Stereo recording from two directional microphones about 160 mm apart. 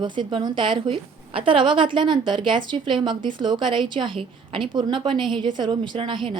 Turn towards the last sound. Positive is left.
turn(degrees=-30)  # may be behind; listen again after turning